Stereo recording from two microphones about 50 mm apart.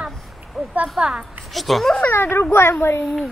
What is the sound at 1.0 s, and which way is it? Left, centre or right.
Speech, centre.